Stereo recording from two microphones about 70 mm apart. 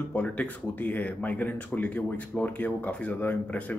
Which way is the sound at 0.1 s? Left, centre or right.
Centre.